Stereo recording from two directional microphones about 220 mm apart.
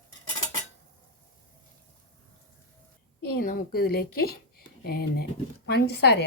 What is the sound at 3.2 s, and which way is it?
Speech, 45° left (ahead or behind).